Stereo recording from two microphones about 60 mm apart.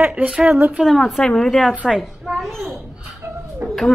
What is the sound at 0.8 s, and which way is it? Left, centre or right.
Speech, centre.